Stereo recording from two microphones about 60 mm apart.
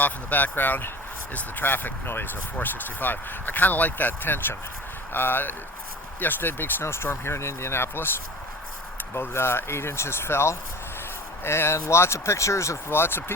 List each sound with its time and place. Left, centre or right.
0.0 s speech: left
9.1 s speech: left